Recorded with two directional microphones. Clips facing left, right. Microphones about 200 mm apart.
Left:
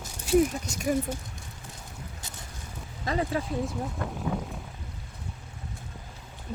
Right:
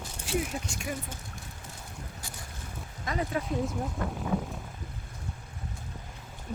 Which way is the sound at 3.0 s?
30° left (ahead or behind).